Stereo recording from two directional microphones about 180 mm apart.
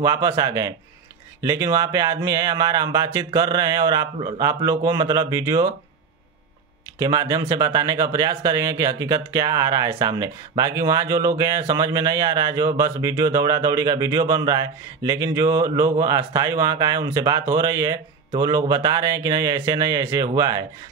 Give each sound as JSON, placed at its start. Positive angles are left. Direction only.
{"t": 0.0, "sound": "speech", "side_deg": -20}
{"t": 7.0, "sound": "speech", "side_deg": -20}